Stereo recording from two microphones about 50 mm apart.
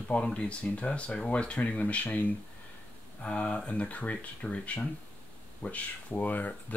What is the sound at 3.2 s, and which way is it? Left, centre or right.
Speech, left.